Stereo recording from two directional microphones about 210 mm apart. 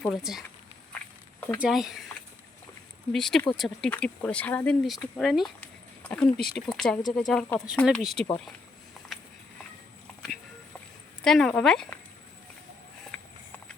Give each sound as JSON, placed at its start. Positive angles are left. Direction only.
{"t": 0.0, "sound": "speech", "side_deg": 0}
{"t": 1.6, "sound": "speech", "side_deg": 0}
{"t": 3.1, "sound": "speech", "side_deg": 0}
{"t": 5.1, "sound": "a sound", "side_deg": 0}
{"t": 6.3, "sound": "speech", "side_deg": 45}
{"t": 6.6, "sound": "speech", "side_deg": 0}
{"t": 9.1, "sound": "a sound", "side_deg": 0}
{"t": 11.2, "sound": "speech", "side_deg": 0}
{"t": 13.1, "sound": "a sound", "side_deg": 5}